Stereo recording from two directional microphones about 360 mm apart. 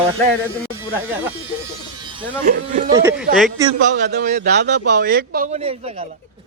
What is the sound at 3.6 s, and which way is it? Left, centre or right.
Speech, right.